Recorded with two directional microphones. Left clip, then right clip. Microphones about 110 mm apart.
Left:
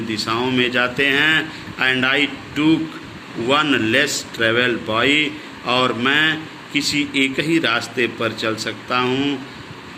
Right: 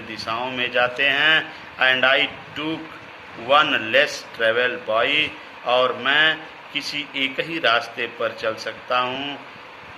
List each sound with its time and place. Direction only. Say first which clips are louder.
0.1 s speech: left 5 dB; 25° right (ahead or behind)